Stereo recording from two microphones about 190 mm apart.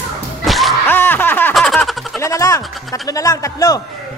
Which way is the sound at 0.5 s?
Centre (ahead or behind).